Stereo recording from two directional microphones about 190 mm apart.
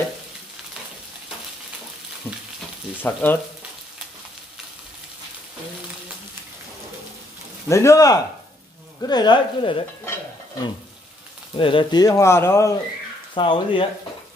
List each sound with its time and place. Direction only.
2.3 s speech: 10° left (ahead or behind)
7.6 s speech: 15° left (ahead or behind)
11.5 s speech: 25° left (ahead or behind)
13.3 s speech: 25° left (ahead or behind)